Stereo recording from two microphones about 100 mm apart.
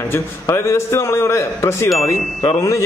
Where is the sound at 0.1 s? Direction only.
25° left (ahead or behind).